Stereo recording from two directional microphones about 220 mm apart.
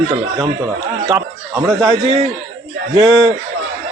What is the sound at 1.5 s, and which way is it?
A man's voice, 15° right (ahead or behind).